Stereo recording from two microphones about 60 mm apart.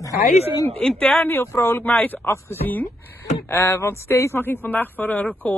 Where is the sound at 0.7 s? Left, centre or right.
Centre.